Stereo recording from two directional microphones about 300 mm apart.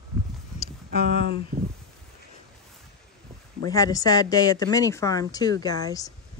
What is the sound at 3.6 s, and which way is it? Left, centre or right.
Speech, centre.